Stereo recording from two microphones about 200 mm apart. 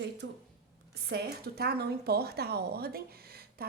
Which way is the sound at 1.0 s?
55° right (ahead or behind).